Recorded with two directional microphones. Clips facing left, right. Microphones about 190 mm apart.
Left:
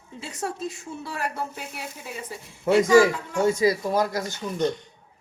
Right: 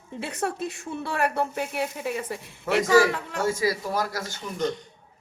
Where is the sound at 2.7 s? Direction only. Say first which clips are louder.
Left 3 dB; 25° left (ahead or behind).